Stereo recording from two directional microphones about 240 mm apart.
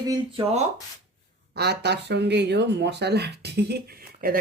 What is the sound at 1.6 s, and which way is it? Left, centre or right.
Speech, right.